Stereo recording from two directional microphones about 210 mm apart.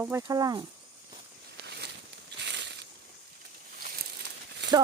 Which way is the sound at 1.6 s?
55° right (ahead or behind).